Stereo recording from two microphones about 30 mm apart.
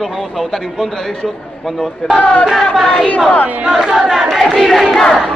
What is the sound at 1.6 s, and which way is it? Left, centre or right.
Speech, centre.